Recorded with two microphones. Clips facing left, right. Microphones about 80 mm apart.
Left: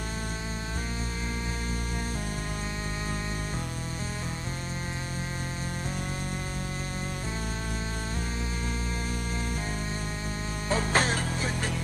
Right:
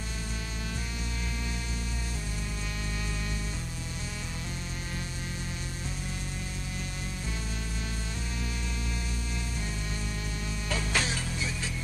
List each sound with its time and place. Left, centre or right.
10.7 s music: left